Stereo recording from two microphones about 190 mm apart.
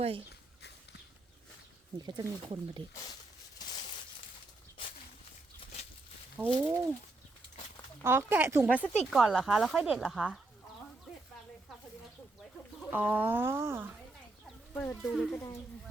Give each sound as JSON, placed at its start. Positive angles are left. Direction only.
{"t": 0.0, "sound": "speech", "side_deg": -30}
{"t": 2.0, "sound": "speech", "side_deg": -25}
{"t": 3.8, "sound": "a sound", "side_deg": 25}
{"t": 6.3, "sound": "speech", "side_deg": -10}
{"t": 8.0, "sound": "speech", "side_deg": -10}
{"t": 12.9, "sound": "speech", "side_deg": -10}
{"t": 14.7, "sound": "speech", "side_deg": 10}